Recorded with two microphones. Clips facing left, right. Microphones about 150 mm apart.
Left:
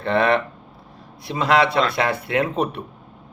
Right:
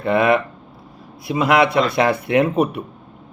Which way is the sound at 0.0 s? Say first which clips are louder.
Right 3 dB; 10° right (ahead or behind).